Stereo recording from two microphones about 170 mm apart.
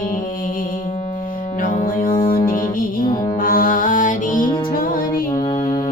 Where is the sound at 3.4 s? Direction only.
55° left (ahead or behind).